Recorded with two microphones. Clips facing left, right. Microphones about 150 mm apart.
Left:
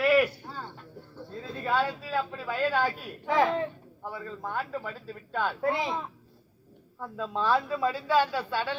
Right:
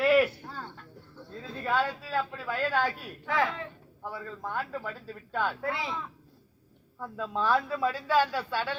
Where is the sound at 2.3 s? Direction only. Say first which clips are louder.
Left 3 dB; 15° left (ahead or behind).